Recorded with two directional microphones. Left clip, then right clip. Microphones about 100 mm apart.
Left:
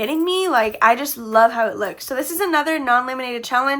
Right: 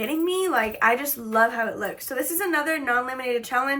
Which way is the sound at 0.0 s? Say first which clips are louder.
Left 5 dB; 45° left (ahead or behind).